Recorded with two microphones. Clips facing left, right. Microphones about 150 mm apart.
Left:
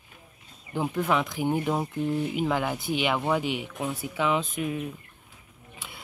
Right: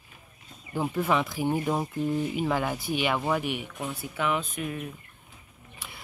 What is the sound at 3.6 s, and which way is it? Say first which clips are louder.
Speech: left 3 dB; 20° left (ahead or behind).